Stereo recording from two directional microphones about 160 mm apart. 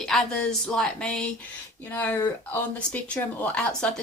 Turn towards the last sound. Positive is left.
turn(degrees=10)  # may be behind; listen again after turning